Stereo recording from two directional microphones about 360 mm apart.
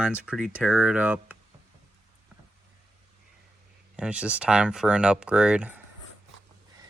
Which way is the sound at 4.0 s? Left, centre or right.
Centre.